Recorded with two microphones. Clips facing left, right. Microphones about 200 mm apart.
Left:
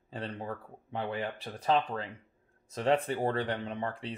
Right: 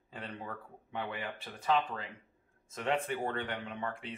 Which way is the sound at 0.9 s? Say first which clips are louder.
Left 5 dB; 35° left (ahead or behind).